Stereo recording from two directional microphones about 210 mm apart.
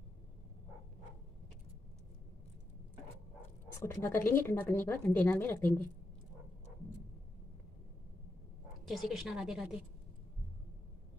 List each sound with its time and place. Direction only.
3.8 s a woman's voice: 10° left (ahead or behind)
8.8 s a woman's voice: centre (ahead or behind)